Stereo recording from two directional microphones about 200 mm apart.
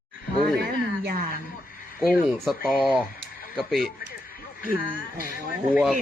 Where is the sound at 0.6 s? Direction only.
50° right (ahead or behind).